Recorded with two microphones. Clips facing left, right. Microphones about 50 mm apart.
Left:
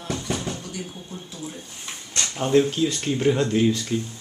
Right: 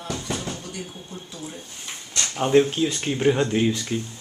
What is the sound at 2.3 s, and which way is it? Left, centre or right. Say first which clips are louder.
Speech: right 1 dB; centre.